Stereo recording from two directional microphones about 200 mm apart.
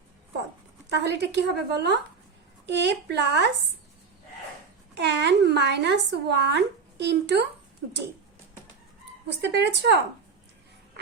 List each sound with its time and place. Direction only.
0.9 s speech: 60° right (ahead or behind)
4.9 s speech: 60° right (ahead or behind)
9.2 s speech: 60° right (ahead or behind)